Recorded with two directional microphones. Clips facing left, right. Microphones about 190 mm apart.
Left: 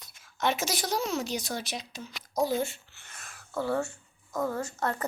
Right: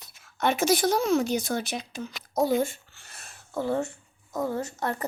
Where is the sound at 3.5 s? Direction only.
20° right (ahead or behind).